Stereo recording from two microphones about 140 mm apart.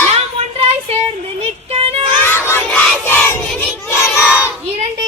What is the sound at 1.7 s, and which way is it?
Music, 45° right (ahead or behind).